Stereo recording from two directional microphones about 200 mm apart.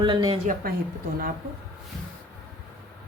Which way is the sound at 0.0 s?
20° right (ahead or behind).